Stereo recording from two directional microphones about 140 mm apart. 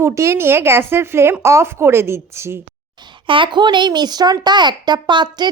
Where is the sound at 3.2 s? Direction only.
35° right (ahead or behind).